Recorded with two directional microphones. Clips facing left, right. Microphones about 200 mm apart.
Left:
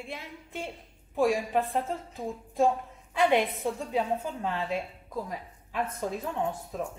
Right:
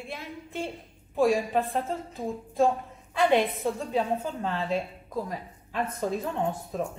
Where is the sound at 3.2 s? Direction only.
15° left (ahead or behind).